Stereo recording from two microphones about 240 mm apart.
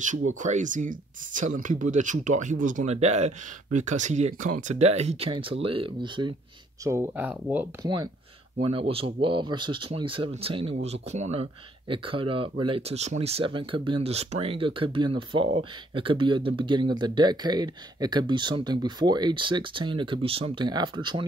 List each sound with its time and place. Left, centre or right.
0.4 s speech: right